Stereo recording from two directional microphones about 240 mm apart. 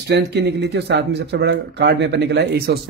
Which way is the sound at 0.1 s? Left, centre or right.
Right.